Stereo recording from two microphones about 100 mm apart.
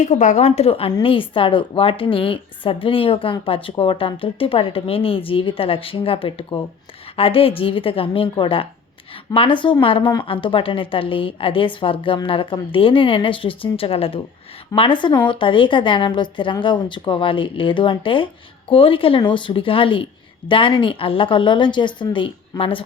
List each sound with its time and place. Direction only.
0.4 s a woman's voice: 90° left; by 0.9 s 75° left (ahead or behind)
1.0 s a woman's voice: 60° left (ahead or behind)
14.8 s a woman's voice: 55° left (ahead or behind)